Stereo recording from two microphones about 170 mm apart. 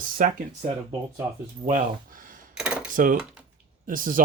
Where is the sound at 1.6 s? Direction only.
50° right (ahead or behind).